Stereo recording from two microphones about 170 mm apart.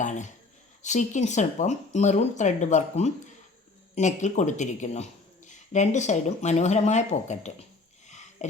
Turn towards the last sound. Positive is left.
turn(degrees=40)  # may be behind; listen again after turning